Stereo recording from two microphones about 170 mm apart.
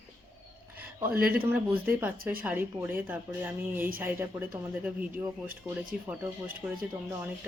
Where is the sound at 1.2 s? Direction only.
60° right (ahead or behind).